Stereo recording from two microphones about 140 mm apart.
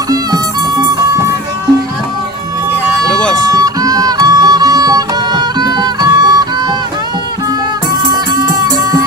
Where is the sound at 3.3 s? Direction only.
25° right (ahead or behind).